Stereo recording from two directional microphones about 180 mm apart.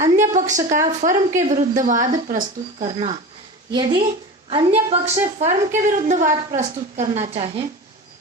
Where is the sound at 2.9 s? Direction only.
35° right (ahead or behind).